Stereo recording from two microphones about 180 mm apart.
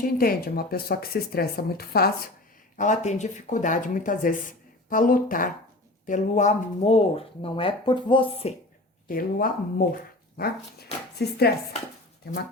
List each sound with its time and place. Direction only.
0.0 s speech: 55° left (ahead or behind)
2.7 s speech: 45° left (ahead or behind)
9.0 s speech: 50° left (ahead or behind)